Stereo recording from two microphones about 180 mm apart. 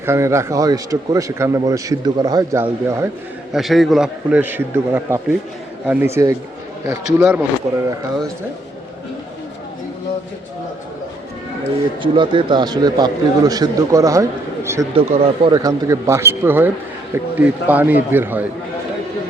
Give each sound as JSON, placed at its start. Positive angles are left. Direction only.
{"t": 0.0, "sound": "a man's voice", "side_deg": -15}
{"t": 3.5, "sound": "a man's voice", "side_deg": 0}
{"t": 12.0, "sound": "a man's voice", "side_deg": -25}
{"t": 14.9, "sound": "a man's voice", "side_deg": -30}